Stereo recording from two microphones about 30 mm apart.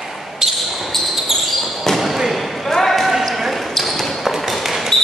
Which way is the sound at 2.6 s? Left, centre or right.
Centre.